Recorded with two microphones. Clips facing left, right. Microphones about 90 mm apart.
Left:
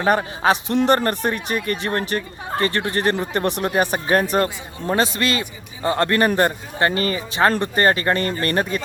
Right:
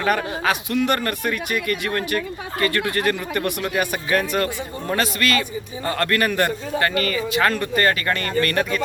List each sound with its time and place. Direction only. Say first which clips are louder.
0.0 s a man's voice: left 3 dB; 30° left (ahead or behind)